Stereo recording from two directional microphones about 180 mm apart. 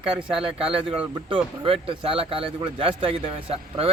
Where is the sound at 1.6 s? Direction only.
30° right (ahead or behind).